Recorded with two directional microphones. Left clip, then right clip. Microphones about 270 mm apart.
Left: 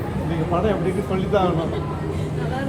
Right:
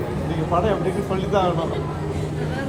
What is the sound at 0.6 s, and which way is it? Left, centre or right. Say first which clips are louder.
Speech: even; centre.